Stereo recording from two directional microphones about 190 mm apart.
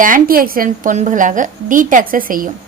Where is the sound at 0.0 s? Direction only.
45° right (ahead or behind).